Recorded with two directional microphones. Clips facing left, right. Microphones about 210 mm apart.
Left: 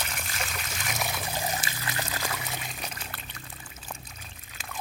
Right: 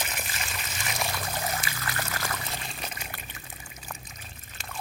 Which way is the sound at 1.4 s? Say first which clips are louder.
Even; 15° left (ahead or behind).